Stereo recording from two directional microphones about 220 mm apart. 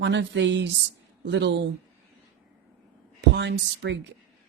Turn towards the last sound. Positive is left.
turn(degrees=-55)  # may be behind; listen again after turning